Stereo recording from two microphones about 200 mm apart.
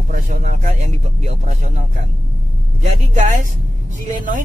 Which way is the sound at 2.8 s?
40° right (ahead or behind).